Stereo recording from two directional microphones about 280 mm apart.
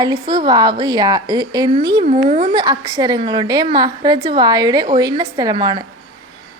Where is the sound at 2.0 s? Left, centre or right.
Right.